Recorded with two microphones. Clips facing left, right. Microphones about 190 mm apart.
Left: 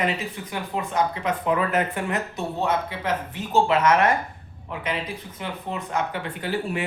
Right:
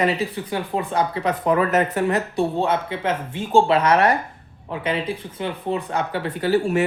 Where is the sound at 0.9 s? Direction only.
35° right (ahead or behind).